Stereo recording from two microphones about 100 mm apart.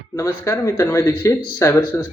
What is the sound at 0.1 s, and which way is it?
Speech, 35° left (ahead or behind).